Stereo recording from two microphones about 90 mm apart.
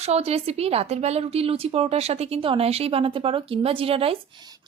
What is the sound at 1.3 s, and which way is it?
Speech, 90° right.